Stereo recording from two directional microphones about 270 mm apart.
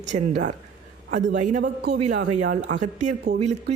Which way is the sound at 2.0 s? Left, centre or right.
Right.